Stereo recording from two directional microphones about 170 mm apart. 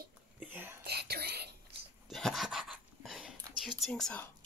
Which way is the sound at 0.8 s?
70° right (ahead or behind).